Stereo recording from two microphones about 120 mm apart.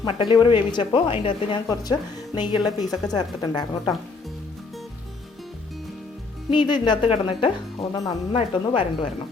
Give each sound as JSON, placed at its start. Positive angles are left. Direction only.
{"t": 0.0, "sound": "speech", "side_deg": 40}
{"t": 1.6, "sound": "a woman's voice", "side_deg": 30}
{"t": 6.5, "sound": "a woman's voice", "side_deg": 40}
{"t": 7.1, "sound": "speech", "side_deg": 50}